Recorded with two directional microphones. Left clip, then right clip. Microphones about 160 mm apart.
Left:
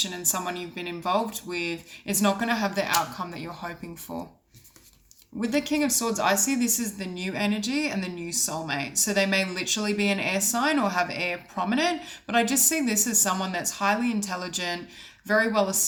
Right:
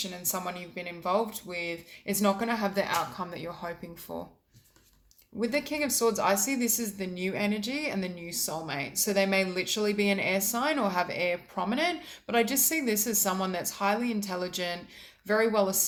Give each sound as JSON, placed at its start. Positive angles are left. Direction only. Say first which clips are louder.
{"t": 0.0, "sound": "speech", "louder": "left 6 dB", "side_deg": -20}
{"t": 5.4, "sound": "speech", "louder": "left 3 dB", "side_deg": -30}